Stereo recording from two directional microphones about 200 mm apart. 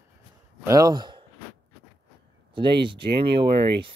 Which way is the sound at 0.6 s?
15° right (ahead or behind).